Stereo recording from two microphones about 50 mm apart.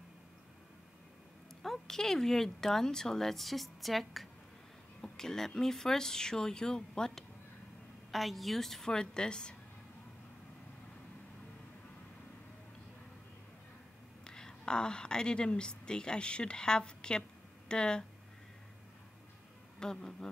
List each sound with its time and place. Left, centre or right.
1.6 s speech: centre
8.1 s speech: centre
14.2 s a woman's voice: centre
19.8 s speech: centre